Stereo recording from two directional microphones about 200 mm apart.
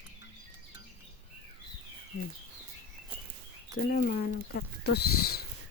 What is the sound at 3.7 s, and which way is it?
Speech, 50° left (ahead or behind).